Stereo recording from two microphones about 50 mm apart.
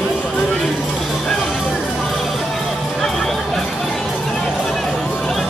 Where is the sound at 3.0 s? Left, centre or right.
Centre.